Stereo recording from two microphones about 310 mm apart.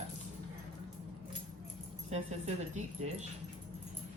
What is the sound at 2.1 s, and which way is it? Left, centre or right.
Speech, right.